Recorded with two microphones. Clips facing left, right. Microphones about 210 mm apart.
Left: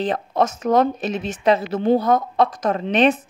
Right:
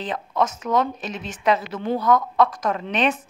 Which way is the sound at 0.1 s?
35° left (ahead or behind).